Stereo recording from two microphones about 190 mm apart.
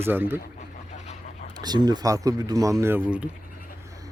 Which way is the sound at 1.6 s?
20° right (ahead or behind).